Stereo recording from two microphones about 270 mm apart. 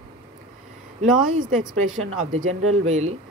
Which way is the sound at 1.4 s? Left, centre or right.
Right.